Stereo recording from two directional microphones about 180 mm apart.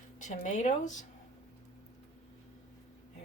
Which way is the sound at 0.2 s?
40° left (ahead or behind).